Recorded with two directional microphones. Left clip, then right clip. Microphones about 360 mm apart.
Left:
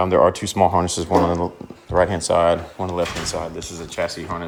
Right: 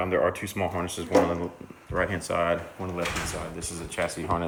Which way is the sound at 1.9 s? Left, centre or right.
Left.